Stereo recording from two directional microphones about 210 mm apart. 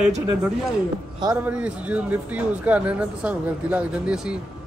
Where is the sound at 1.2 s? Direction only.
10° right (ahead or behind).